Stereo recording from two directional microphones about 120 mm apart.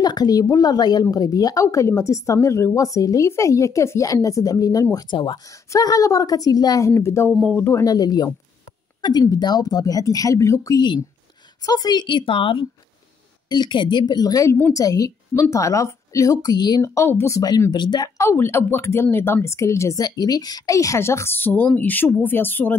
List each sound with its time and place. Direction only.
0.0 s a woman's voice: 35° left (ahead or behind)
4.9 s speech: 40° left (ahead or behind)
5.7 s a woman's voice: 30° left (ahead or behind)
7.3 s speech: 10° left (ahead or behind)
7.6 s speech: 25° left (ahead or behind)
9.3 s a woman's voice: 35° left (ahead or behind)
18.1 s a woman's voice: 20° left (ahead or behind)